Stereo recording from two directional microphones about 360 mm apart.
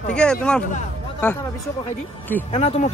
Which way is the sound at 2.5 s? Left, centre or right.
Centre.